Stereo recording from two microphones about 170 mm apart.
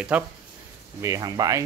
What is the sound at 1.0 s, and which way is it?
Speech, 20° right (ahead or behind).